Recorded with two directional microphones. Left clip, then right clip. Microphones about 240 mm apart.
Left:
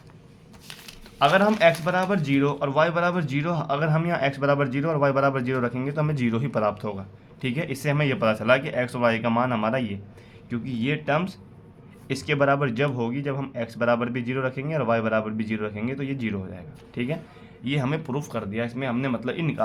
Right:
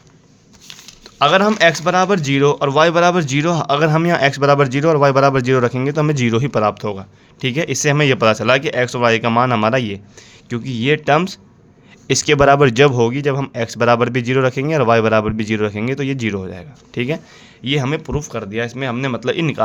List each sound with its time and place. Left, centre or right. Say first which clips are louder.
1.2 s speech: right 6 dB; right